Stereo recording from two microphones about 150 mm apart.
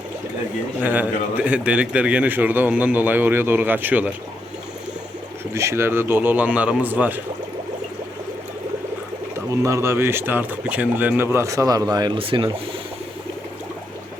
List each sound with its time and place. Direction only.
0.8 s a man's voice: 10° right (ahead or behind)
5.5 s a man's voice: 20° right (ahead or behind)
9.5 s a man's voice: 20° right (ahead or behind); by 12.5 s 35° right (ahead or behind)